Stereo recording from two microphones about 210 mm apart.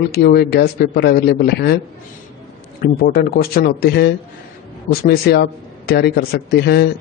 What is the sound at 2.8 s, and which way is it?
A man's voice, 45° left (ahead or behind).